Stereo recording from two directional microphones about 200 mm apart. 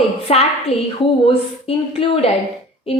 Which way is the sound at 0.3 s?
30° left (ahead or behind).